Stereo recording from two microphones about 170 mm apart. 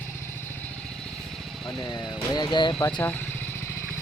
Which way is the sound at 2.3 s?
25° left (ahead or behind).